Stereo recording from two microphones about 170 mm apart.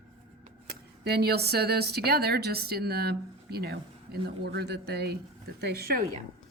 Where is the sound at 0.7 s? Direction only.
70° right (ahead or behind).